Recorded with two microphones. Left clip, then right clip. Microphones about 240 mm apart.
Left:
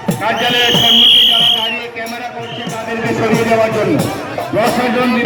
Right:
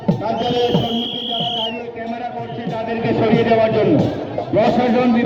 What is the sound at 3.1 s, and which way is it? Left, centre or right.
Speech, left.